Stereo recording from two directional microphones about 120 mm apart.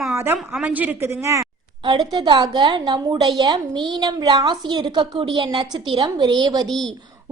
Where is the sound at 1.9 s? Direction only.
40° right (ahead or behind).